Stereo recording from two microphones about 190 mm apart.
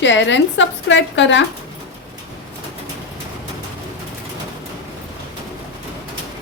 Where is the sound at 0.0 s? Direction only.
70° left (ahead or behind).